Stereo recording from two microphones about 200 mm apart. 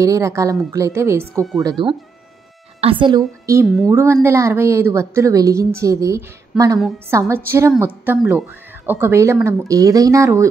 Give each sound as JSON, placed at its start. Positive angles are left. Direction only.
{"t": 0.0, "sound": "a woman's voice", "side_deg": -15}
{"t": 3.9, "sound": "a woman's voice", "side_deg": -10}
{"t": 6.5, "sound": "a woman's voice", "side_deg": -5}